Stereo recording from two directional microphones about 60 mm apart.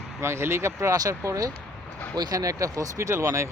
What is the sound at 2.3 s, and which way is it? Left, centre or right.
Speech, right.